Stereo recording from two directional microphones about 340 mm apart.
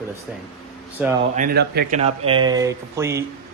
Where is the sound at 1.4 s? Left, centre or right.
Right.